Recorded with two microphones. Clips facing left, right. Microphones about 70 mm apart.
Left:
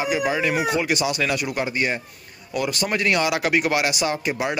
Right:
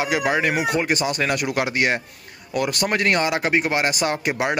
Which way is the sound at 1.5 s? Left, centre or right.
Right.